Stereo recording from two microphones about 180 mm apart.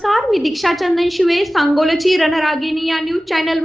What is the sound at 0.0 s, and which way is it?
A woman's voice, centre (ahead or behind).